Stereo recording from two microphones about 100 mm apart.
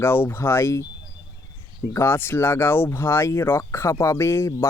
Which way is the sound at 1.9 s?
25° left (ahead or behind).